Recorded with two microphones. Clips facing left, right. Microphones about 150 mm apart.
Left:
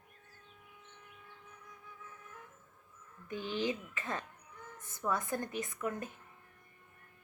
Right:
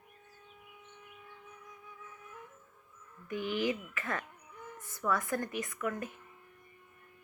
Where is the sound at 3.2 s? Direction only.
30° left (ahead or behind).